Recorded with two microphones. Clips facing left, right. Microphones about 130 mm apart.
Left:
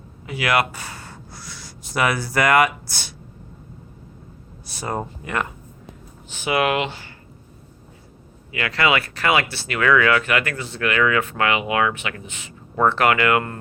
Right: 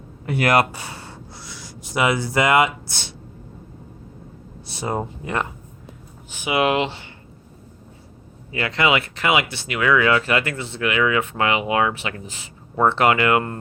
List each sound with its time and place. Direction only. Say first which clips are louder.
0.3 s speech: right 3 dB; 50° right (ahead or behind)
0.8 s speech: right 1 dB; 25° right (ahead or behind)
4.7 s speech: right 2 dB; 20° right (ahead or behind)
6.3 s speech: right 1 dB; 15° right (ahead or behind)
8.5 s speech: right 1 dB; 25° right (ahead or behind)